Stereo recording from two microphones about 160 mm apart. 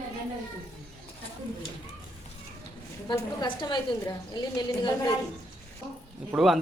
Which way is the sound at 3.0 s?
30° left (ahead or behind).